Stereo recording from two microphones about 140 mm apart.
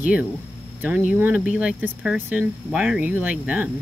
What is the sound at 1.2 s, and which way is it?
Speech, 10° right (ahead or behind).